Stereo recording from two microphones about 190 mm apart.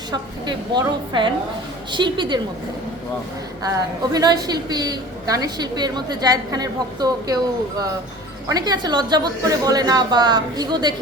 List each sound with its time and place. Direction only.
0.1 s a woman's voice: 20° right (ahead or behind)
3.6 s a woman's voice: 20° right (ahead or behind)
8.4 s a woman's voice: 20° right (ahead or behind)